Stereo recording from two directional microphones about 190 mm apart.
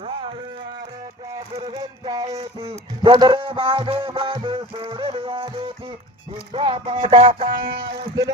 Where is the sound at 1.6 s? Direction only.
20° right (ahead or behind).